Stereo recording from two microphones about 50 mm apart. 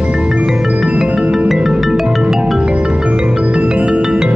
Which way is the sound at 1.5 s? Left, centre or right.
Centre.